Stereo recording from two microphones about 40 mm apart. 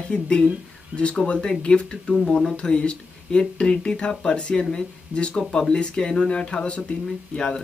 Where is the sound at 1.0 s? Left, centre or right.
Left.